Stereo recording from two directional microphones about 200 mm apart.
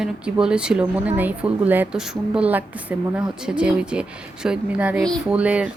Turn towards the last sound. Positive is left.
turn(degrees=-5)  # may be behind; listen again after turning